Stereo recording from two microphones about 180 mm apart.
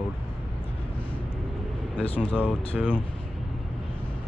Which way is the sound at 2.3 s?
10° left (ahead or behind).